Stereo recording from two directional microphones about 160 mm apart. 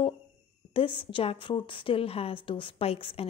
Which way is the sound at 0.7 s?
30° left (ahead or behind).